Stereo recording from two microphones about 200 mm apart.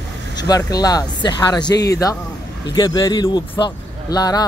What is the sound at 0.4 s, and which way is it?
Speech, 20° left (ahead or behind).